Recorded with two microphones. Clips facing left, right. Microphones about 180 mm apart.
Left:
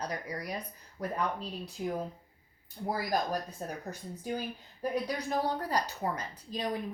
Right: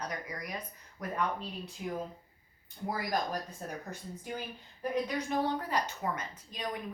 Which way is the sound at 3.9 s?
35° left (ahead or behind).